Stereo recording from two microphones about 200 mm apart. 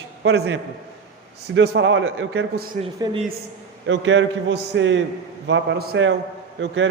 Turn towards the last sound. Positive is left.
turn(degrees=-65)  # may be behind; listen again after turning